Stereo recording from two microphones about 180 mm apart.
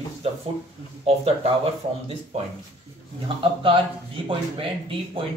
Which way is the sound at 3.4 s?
30° right (ahead or behind).